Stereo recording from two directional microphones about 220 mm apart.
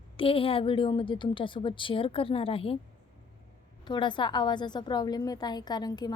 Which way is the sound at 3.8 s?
20° left (ahead or behind).